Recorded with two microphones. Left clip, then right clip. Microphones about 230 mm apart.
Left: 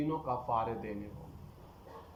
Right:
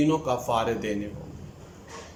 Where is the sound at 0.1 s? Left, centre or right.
Right.